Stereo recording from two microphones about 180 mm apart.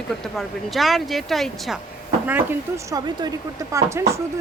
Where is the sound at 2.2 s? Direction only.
10° right (ahead or behind).